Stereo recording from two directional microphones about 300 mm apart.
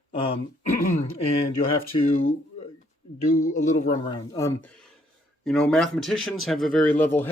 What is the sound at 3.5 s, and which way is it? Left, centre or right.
Speech, left.